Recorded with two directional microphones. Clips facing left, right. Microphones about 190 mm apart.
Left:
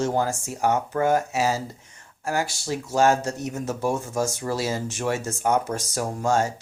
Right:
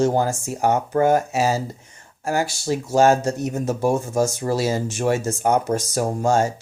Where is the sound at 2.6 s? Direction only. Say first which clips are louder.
Right 4 dB; 30° right (ahead or behind).